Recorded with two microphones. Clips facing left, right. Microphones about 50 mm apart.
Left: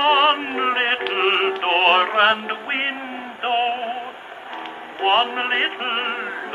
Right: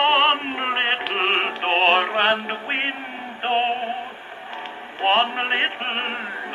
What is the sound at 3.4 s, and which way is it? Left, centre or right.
Music, centre.